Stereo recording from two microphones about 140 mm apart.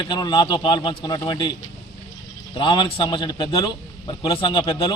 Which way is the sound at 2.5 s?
35° left (ahead or behind).